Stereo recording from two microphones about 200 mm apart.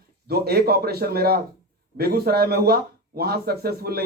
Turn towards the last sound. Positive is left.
turn(degrees=-50)  # may be behind; listen again after turning